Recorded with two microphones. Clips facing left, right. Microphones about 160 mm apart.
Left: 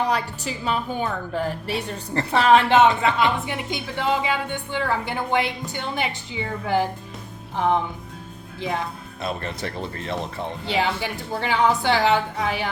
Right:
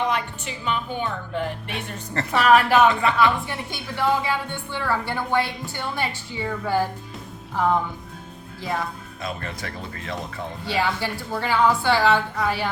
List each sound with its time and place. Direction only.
0.0 s a woman's voice: 35° left (ahead or behind)
2.1 s a woman's voice: 25° left (ahead or behind)
9.2 s a woman's voice: 30° left (ahead or behind)
10.7 s a woman's voice: 20° left (ahead or behind)